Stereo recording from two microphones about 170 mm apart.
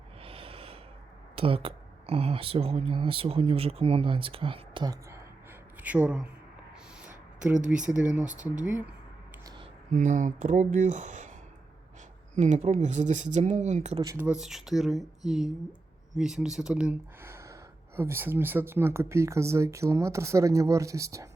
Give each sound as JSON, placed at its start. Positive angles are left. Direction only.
{"t": 0.2, "sound": "snort", "side_deg": -35}
{"t": 1.4, "sound": "speech", "side_deg": -35}
{"t": 5.8, "sound": "speech", "side_deg": -10}
{"t": 7.9, "sound": "speech", "side_deg": -5}
{"t": 9.9, "sound": "speech", "side_deg": -45}
{"t": 12.3, "sound": "speech", "side_deg": -45}
{"t": 14.0, "sound": "speech", "side_deg": -20}
{"t": 14.3, "sound": "speech", "side_deg": -5}